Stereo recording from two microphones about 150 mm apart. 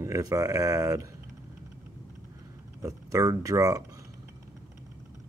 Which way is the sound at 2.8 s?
20° right (ahead or behind).